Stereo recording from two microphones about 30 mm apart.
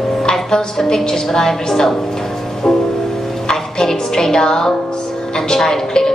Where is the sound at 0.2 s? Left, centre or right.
Left.